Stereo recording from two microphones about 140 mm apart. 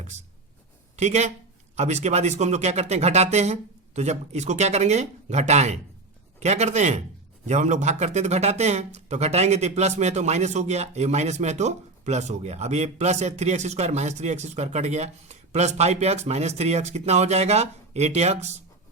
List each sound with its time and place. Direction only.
0.9 s a man's voice: 55° right (ahead or behind)